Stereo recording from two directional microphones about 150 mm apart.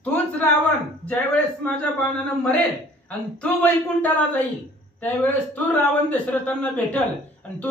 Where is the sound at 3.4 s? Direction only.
10° left (ahead or behind).